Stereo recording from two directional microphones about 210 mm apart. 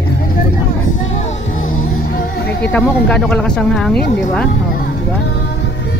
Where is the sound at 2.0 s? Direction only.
45° left (ahead or behind).